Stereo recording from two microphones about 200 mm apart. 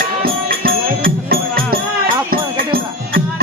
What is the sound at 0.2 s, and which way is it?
Music, 45° right (ahead or behind).